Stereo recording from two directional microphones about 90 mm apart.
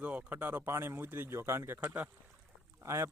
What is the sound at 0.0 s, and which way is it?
Speech, 15° right (ahead or behind).